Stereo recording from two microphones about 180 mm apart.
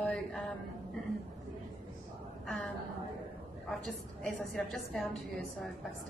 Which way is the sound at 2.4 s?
Centre (ahead or behind).